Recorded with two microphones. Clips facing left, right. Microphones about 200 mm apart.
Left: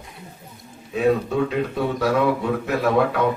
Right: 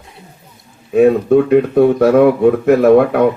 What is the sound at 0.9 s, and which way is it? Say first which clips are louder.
Speech: right 10 dB; 55° right (ahead or behind).